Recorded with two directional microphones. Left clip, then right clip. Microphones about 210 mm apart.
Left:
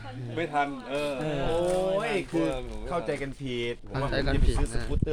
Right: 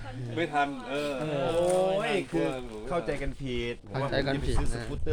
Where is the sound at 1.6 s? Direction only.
10° right (ahead or behind).